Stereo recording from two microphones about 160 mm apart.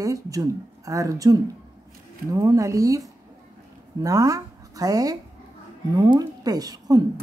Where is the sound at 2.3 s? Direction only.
20° right (ahead or behind).